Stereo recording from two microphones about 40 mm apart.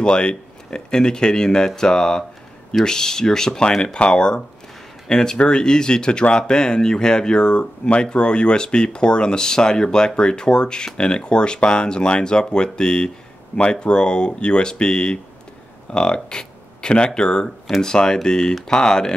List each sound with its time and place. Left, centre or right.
0.0 s speech: left
17.6 s speech: centre
17.9 s speech: centre